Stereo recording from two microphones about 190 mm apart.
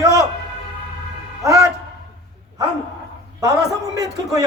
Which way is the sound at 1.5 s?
15° right (ahead or behind).